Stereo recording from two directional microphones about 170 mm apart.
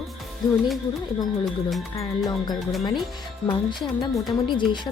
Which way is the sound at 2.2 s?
25° left (ahead or behind).